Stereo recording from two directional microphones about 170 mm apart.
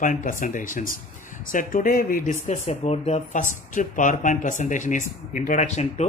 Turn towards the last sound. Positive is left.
turn(degrees=40)  # may be behind; listen again after turning